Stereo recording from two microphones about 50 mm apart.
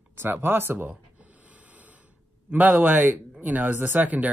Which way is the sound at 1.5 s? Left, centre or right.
Right.